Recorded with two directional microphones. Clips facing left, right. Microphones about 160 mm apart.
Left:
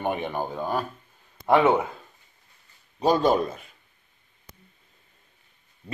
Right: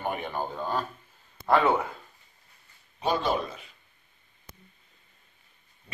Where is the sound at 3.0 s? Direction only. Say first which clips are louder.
Left 6 dB; 40° left (ahead or behind).